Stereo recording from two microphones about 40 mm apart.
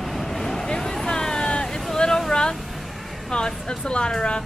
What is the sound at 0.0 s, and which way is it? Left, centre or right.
Vehicle, centre.